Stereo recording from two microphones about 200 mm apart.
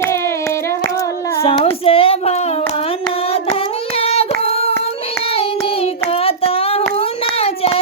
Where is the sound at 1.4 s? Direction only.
30° left (ahead or behind).